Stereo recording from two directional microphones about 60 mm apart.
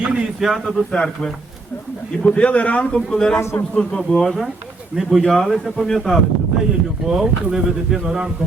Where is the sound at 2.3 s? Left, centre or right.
Left.